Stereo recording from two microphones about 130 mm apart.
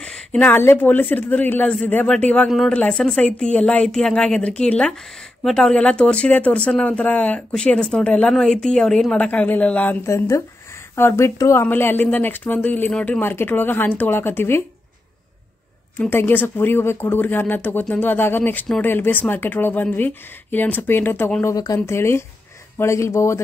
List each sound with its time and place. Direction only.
0.0 s speech: 10° left (ahead or behind)
16.0 s speech: 15° left (ahead or behind)